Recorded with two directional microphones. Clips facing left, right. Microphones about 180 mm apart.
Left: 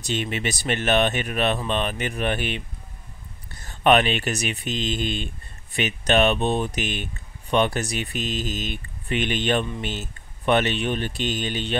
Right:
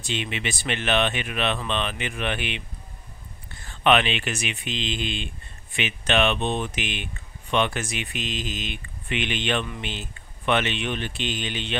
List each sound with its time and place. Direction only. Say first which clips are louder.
0.0 s speech: left 3 dB; 45° left (ahead or behind)